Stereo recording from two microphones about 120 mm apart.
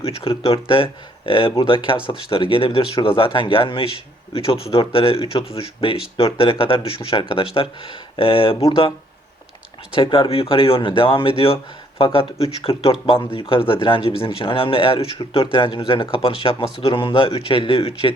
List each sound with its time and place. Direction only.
0.0 s speech: 50° left (ahead or behind)
9.9 s speech: 45° left (ahead or behind)
16.2 s speech: 50° left (ahead or behind)